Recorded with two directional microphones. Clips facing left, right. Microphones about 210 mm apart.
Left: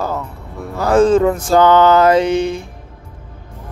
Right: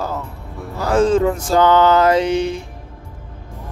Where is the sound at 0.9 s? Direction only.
55° left (ahead or behind).